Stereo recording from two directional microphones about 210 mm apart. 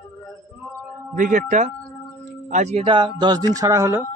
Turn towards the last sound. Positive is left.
turn(degrees=-15)  # may be behind; listen again after turning